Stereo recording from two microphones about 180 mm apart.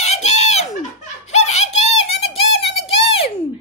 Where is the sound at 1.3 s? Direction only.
40° left (ahead or behind).